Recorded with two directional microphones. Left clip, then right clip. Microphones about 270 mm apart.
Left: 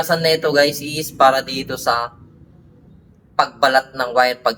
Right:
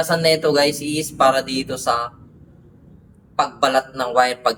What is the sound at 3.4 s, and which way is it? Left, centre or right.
A man's voice, centre.